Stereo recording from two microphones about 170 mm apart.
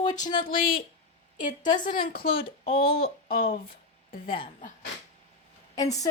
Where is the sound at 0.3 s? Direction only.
60° left (ahead or behind).